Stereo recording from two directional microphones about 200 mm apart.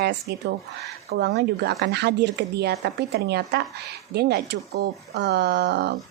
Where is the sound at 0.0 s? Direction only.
55° right (ahead or behind).